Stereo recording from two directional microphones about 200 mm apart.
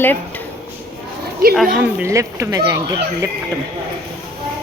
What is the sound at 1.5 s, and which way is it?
Speech, 5° right (ahead or behind).